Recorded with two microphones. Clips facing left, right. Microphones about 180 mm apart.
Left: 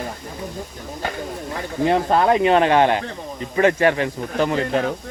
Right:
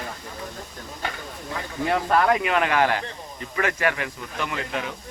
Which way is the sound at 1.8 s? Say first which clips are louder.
Left 4 dB; 25° left (ahead or behind).